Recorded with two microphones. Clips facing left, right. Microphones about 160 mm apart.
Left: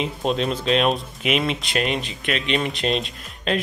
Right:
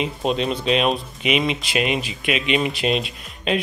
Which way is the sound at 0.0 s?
Centre (ahead or behind).